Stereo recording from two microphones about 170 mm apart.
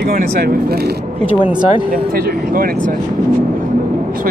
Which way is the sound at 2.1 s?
60° right (ahead or behind).